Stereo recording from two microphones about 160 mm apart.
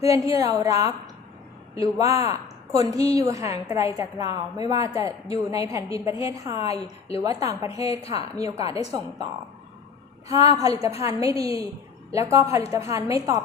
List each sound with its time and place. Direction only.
0.0 s a woman's voice: 20° right (ahead or behind)
10.6 s a woman's voice: 20° right (ahead or behind)